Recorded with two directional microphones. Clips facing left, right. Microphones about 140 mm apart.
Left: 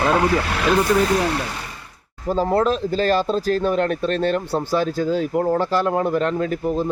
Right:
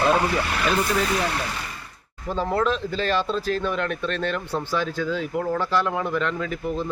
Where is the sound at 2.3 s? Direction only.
35° left (ahead or behind).